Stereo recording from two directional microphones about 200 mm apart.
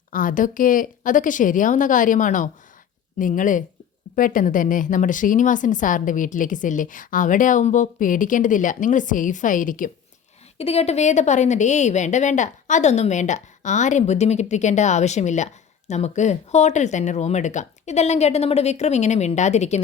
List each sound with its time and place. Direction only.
0.1 s a woman's voice: 40° left (ahead or behind)
10.6 s a woman's voice: 30° left (ahead or behind)